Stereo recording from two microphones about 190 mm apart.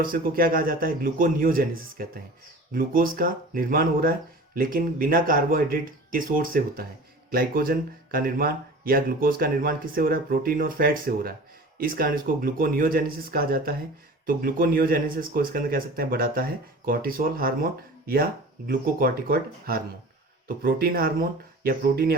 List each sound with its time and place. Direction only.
0.0 s speech: 50° right (ahead or behind)